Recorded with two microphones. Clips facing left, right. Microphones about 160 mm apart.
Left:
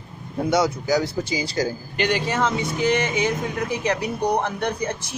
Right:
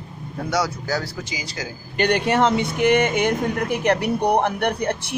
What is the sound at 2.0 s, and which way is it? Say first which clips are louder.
Speech: right 4 dB; 55° right (ahead or behind).